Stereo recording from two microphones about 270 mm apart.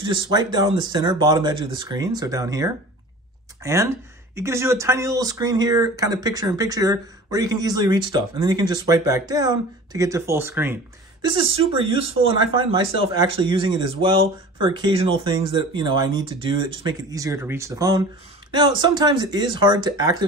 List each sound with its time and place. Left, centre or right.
0.1 s speech: centre
11.2 s speech: centre